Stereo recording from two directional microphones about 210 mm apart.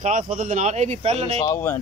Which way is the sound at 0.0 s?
40° right (ahead or behind).